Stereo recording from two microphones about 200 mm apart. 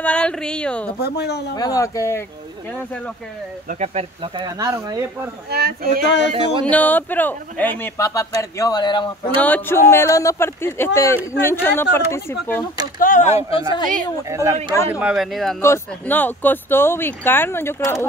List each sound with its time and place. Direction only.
0.0 s speech: 5° left (ahead or behind)
0.9 s speech: 55° left (ahead or behind)
1.5 s speech: 20° left (ahead or behind)
3.6 s speech: 35° right (ahead or behind); by 5.3 s 15° right (ahead or behind)
5.5 s speech: 50° right (ahead or behind)
6.6 s speech: 10° left (ahead or behind)
9.4 s speech: 10° left (ahead or behind)
13.0 s speech: 40° left (ahead or behind)
13.5 s speech: 25° left (ahead or behind)
14.3 s speech: 15° right (ahead or behind)
15.0 s speech: 5° right (ahead or behind)
15.6 s speech: 10° left (ahead or behind)